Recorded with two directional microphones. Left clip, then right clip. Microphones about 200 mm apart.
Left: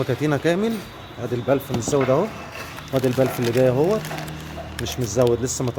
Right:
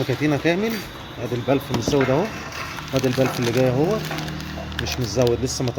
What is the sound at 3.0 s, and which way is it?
Speech, 15° left (ahead or behind).